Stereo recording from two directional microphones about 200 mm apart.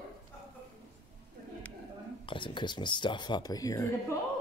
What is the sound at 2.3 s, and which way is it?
Speech, 25° left (ahead or behind).